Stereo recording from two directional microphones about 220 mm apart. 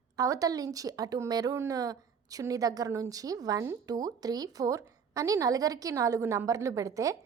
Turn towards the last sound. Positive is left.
turn(degrees=-15)  # may be behind; listen again after turning